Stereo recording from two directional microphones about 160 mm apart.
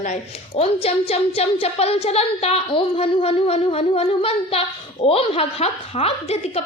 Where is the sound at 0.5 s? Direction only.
40° left (ahead or behind).